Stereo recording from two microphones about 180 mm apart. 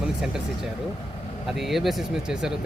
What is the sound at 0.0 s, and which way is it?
Speech, 5° right (ahead or behind).